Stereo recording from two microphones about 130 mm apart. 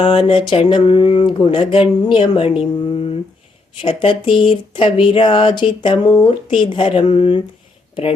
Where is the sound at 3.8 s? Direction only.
40° left (ahead or behind).